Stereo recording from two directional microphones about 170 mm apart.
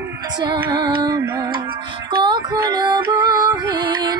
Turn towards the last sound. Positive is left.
turn(degrees=-25)  # may be behind; listen again after turning